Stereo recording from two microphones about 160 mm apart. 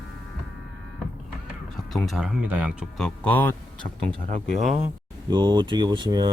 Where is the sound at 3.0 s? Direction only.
10° left (ahead or behind).